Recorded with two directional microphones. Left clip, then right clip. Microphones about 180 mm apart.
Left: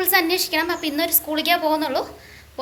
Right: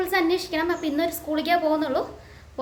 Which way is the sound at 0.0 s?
10° right (ahead or behind).